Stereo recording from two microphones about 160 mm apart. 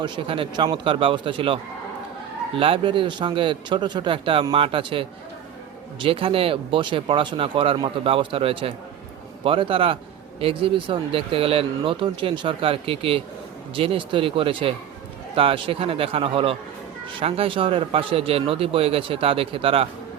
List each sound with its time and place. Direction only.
0.0 s speech: 30° right (ahead or behind)
2.6 s speech: 35° right (ahead or behind)